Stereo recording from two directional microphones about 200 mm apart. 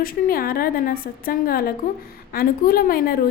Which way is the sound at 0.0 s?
45° left (ahead or behind).